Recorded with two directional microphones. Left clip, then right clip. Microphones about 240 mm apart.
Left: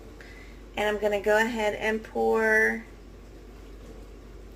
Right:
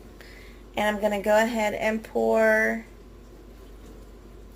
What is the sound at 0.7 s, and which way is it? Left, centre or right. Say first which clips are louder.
A woman's voice: right 1 dB; right.